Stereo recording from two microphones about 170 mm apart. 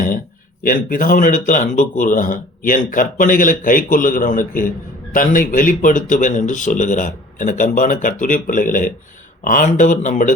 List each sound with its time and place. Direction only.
0.6 s speech: 55° left (ahead or behind)